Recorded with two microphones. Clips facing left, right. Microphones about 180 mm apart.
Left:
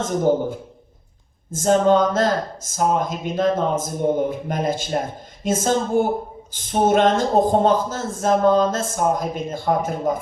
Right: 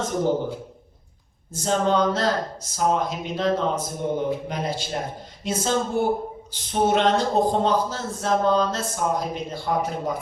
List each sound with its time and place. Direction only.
0.0 s a man's voice: 50° left (ahead or behind)